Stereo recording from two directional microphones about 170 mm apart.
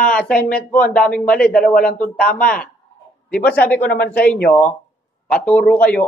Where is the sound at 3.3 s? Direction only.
10° left (ahead or behind).